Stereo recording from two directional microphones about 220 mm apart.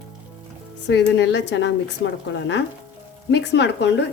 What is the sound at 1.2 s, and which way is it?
Speech, 55° left (ahead or behind).